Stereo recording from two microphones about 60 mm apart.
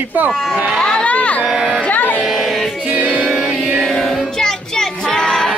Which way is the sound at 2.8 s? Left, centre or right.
Right.